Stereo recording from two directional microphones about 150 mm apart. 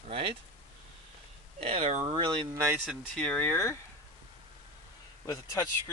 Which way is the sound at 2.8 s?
5° left (ahead or behind).